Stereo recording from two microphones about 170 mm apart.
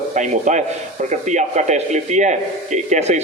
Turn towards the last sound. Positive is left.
turn(degrees=-40)  # may be behind; listen again after turning